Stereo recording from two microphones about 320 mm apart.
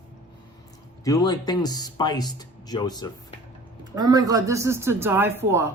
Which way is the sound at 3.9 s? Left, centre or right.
Centre.